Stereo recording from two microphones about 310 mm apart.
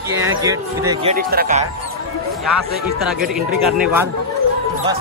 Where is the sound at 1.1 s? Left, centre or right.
Right.